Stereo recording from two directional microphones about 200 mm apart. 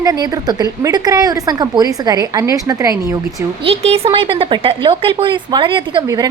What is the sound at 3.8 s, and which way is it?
A woman's voice, 30° right (ahead or behind).